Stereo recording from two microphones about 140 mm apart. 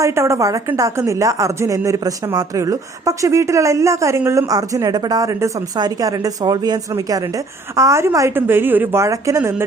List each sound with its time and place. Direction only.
0.0 s a woman's voice: 20° right (ahead or behind)